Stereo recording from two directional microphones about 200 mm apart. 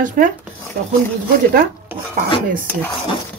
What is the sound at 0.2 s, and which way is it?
Speech, 45° right (ahead or behind).